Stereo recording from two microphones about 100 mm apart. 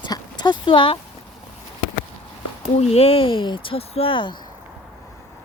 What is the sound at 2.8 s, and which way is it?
Speech, 90° left.